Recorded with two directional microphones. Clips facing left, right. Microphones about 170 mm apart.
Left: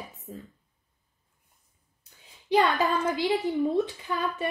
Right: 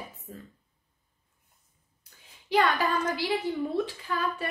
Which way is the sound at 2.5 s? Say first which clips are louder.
Left 2 dB; 20° left (ahead or behind).